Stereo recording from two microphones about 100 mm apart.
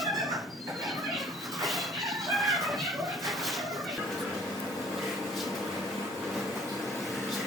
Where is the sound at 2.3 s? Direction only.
Centre (ahead or behind).